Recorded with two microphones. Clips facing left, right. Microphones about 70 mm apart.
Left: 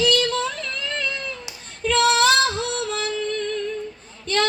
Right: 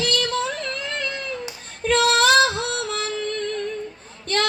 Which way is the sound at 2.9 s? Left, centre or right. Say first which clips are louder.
Left 1 dB; right.